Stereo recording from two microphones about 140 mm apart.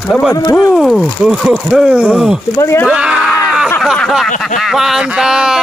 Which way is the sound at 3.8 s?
Centre (ahead or behind).